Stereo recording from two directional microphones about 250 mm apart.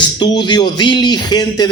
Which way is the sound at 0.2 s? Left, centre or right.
Centre.